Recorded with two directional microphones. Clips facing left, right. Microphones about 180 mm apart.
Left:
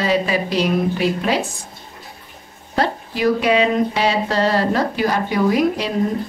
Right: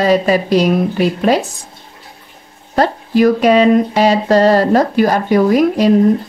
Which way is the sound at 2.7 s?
45° right (ahead or behind).